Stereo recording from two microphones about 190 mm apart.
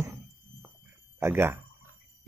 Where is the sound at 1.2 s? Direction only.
15° right (ahead or behind).